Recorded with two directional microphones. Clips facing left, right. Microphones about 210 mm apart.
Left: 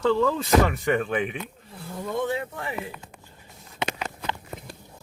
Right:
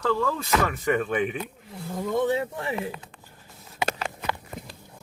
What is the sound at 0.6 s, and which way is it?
Speech, 5° left (ahead or behind).